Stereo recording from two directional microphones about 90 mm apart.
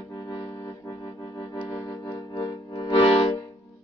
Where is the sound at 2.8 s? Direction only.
60° left (ahead or behind).